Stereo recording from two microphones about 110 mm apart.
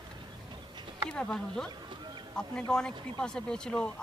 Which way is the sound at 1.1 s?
5° left (ahead or behind).